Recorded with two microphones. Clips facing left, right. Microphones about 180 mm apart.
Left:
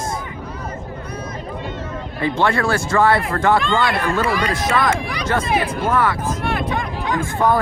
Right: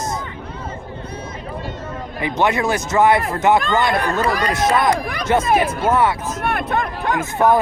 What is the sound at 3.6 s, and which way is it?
Speech, 45° right (ahead or behind).